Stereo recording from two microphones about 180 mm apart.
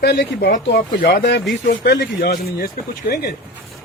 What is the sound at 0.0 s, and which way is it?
Speech, 65° left (ahead or behind).